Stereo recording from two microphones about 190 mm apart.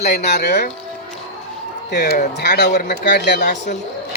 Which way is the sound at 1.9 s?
55° left (ahead or behind).